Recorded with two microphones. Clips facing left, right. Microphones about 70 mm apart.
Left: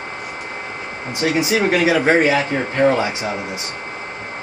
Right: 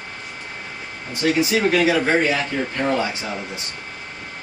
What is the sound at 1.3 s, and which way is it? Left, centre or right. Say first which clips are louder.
Speech: left 2 dB; centre.